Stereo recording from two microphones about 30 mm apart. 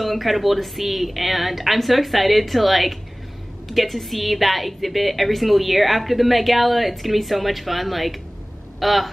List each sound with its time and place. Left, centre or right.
0.0 s a woman's voice: centre